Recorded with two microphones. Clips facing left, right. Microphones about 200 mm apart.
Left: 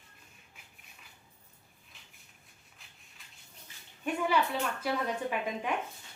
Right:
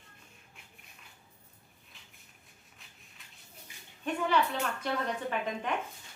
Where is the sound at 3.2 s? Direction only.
Centre (ahead or behind).